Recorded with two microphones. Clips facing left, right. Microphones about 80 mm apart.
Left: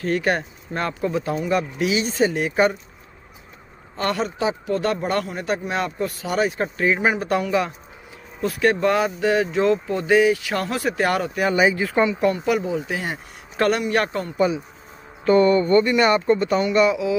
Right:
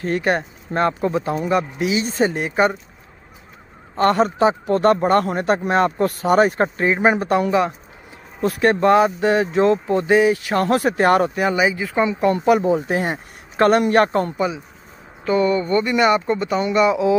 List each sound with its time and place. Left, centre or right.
0.0 s speech: right
3.9 s speech: right
6.8 s speech: right
11.4 s speech: centre
12.3 s speech: right
14.3 s speech: centre